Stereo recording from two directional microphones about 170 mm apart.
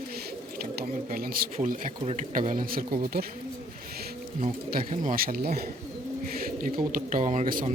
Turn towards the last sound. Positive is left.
turn(degrees=-50)  # may be behind; listen again after turning